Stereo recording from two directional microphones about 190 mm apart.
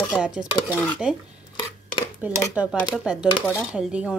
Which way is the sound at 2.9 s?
5° right (ahead or behind).